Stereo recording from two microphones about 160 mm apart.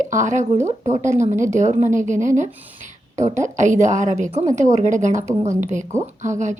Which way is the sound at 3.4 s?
50° right (ahead or behind).